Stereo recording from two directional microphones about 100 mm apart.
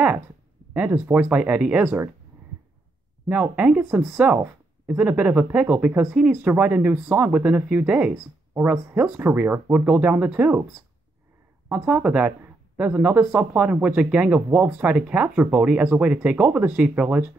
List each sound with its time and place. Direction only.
0.7 s speech: 15° right (ahead or behind)
3.3 s speech: 15° right (ahead or behind)
11.7 s speech: 15° right (ahead or behind)